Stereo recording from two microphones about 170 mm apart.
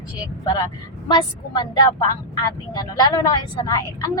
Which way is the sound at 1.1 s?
25° left (ahead or behind).